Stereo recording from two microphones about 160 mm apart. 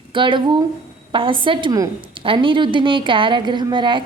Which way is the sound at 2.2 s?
30° right (ahead or behind).